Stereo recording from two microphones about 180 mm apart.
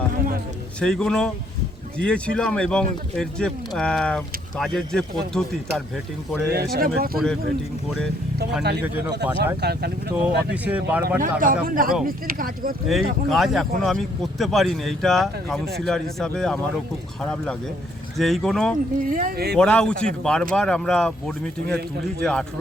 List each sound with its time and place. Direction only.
0.8 s speech: 5° left (ahead or behind)
6.5 s speech: 60° right (ahead or behind)
9.6 s speech: 65° right (ahead or behind)
10.1 s speech: 10° right (ahead or behind)
11.2 s speech: 50° right (ahead or behind)
12.9 s speech: centre (ahead or behind)
18.9 s speech: 50° right (ahead or behind)
19.5 s speech: 5° left (ahead or behind)